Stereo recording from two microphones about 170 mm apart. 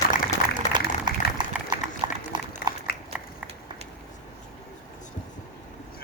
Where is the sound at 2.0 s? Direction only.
25° right (ahead or behind).